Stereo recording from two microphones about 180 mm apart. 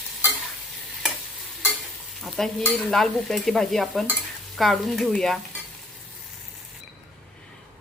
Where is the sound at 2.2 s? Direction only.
Centre (ahead or behind).